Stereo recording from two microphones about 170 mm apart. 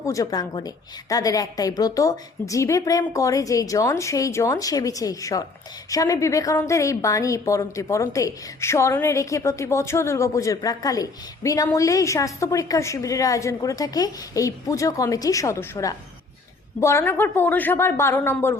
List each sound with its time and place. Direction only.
0.0 s a woman's voice: 20° left (ahead or behind)